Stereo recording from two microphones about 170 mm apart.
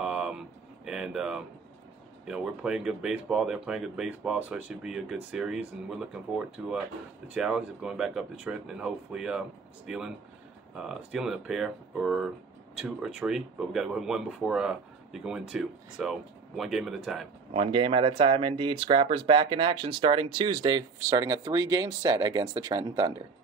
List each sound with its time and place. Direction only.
0.0 s a sound: 5° right (ahead or behind)
2.2 s speech: 5° right (ahead or behind)
17.5 s speech: 35° right (ahead or behind)